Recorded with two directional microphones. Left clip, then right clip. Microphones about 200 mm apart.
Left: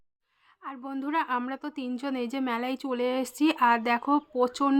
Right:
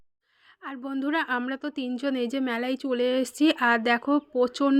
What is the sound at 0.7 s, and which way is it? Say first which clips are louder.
A woman's voice: right 2 dB; 20° right (ahead or behind).